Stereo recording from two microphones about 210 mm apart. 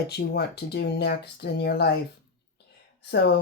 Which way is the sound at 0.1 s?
50° left (ahead or behind).